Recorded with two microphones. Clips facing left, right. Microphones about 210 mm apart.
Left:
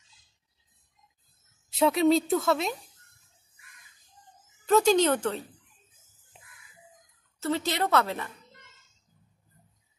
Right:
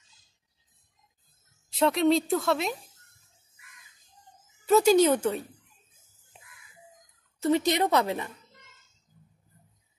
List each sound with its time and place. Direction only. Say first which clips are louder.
1.7 s a woman's voice: left 1 dB; centre (ahead or behind)
4.6 s a woman's voice: right 2 dB; 10° right (ahead or behind)
7.3 s a woman's voice: right 5 dB; 15° right (ahead or behind)